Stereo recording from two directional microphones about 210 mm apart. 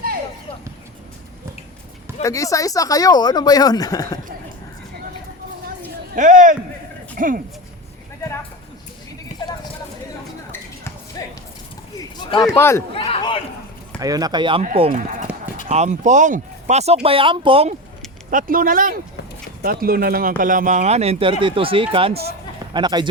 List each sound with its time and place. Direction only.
2.2 s speech: 15° left (ahead or behind)
6.1 s speech: 40° right (ahead or behind)
9.3 s a sound: 35° left (ahead or behind)
11.2 s clip-clop: 20° left (ahead or behind)
11.9 s a sound: 20° left (ahead or behind)
12.5 s speech: 10° left (ahead or behind)
12.9 s a sound: 25° left (ahead or behind)
14.0 s speech: 15° right (ahead or behind)
14.6 s speech: 35° right (ahead or behind)
18.3 s speech: 40° right (ahead or behind); by 23.0 s 20° right (ahead or behind)